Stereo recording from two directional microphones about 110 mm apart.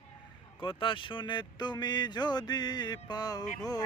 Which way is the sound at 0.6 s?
50° left (ahead or behind).